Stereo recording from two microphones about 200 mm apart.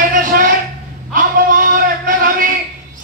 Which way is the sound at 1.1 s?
40° right (ahead or behind).